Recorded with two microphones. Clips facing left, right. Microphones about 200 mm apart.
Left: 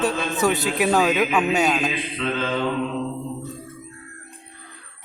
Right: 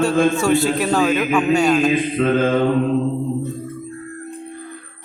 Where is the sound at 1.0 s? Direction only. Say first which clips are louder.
Right 3 dB; 5° left (ahead or behind).